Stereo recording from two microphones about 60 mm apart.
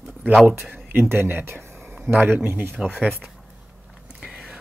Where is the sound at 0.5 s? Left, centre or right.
Right.